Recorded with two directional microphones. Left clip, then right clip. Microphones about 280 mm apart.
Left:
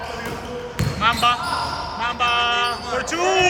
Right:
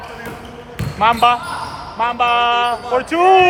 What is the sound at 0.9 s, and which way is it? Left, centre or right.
Speech, centre.